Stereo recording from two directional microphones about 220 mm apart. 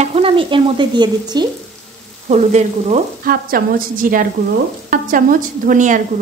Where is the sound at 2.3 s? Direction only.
30° right (ahead or behind).